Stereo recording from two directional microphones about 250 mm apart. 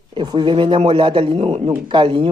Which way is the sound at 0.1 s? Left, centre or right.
Centre.